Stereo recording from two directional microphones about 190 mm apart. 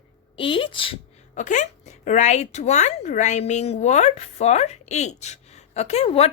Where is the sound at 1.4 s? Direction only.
40° left (ahead or behind).